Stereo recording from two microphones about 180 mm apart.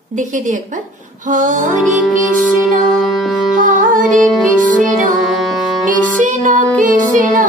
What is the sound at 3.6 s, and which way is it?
Music, 45° right (ahead or behind).